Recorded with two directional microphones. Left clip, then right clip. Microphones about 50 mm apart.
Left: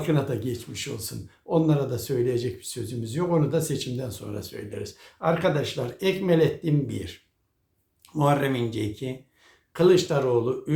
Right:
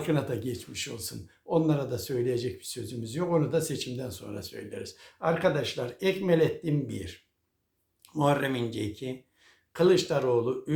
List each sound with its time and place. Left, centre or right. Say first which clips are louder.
0.0 s speech: left 3 dB; right